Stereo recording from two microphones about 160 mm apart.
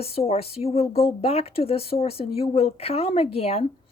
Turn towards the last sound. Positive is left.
turn(degrees=40)  # may be behind; listen again after turning